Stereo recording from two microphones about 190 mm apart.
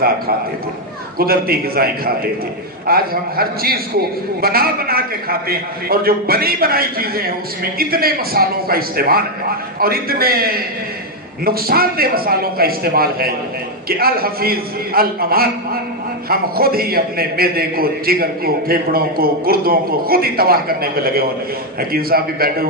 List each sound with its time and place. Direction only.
1.1 s a man's voice: 55° right (ahead or behind)